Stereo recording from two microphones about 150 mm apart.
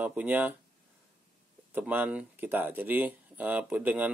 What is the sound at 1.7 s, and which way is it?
Speech, 10° right (ahead or behind).